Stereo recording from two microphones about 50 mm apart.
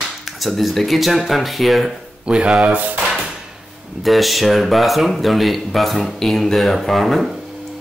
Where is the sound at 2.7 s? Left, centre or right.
Right.